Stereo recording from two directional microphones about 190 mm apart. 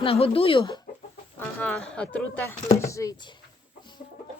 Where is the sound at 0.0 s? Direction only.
30° left (ahead or behind).